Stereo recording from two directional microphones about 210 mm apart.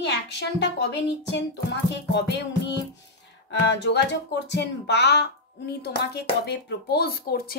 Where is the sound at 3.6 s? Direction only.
55° left (ahead or behind).